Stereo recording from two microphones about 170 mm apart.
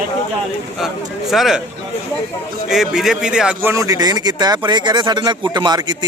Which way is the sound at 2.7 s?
Centre (ahead or behind).